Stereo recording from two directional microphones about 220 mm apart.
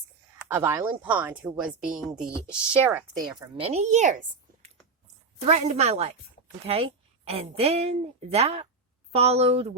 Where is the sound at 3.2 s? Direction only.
20° right (ahead or behind).